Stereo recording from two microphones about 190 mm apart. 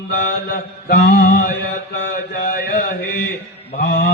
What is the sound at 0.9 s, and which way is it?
Mantra, 45° left (ahead or behind).